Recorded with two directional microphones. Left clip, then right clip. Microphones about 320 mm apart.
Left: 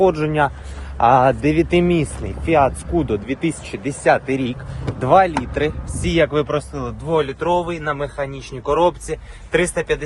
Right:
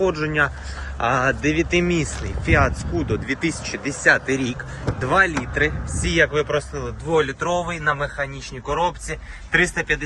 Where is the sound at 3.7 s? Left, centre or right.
Centre.